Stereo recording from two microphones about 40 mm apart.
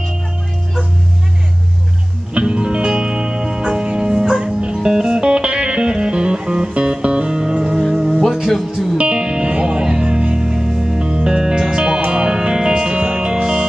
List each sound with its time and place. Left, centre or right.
2.3 s music: right
8.9 s music: right
11.0 s music: right